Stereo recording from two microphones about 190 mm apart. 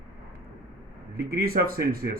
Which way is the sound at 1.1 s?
50° right (ahead or behind).